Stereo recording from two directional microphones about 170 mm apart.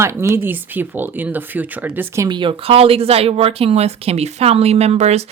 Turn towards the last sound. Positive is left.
turn(degrees=-40)  # may be behind; listen again after turning